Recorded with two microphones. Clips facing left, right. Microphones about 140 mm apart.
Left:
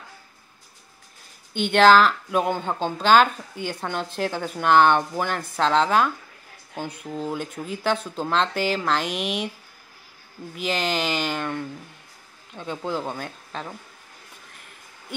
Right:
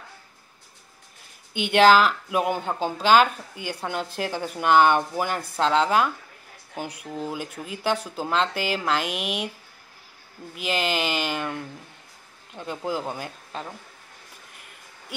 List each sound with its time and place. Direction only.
1.5 s speech: 10° right (ahead or behind)
10.5 s speech: 5° right (ahead or behind)